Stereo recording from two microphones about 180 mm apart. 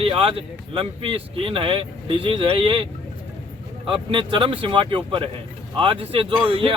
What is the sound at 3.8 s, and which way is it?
Speech, 30° right (ahead or behind).